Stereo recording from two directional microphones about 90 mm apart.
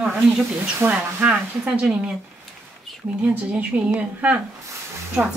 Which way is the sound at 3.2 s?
15° right (ahead or behind).